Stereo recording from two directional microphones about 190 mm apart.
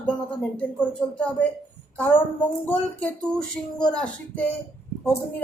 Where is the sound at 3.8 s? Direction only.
5° left (ahead or behind).